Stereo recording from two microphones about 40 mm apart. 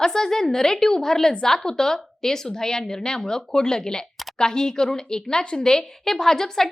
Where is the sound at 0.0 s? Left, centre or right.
Centre.